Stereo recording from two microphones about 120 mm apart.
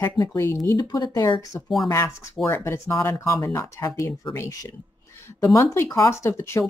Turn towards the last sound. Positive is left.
turn(degrees=20)  # may be behind; listen again after turning